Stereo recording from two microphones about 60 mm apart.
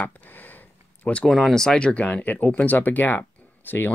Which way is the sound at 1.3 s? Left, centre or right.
Centre.